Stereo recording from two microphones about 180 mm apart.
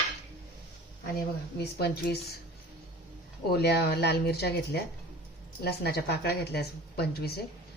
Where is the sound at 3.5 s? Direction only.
65° left (ahead or behind).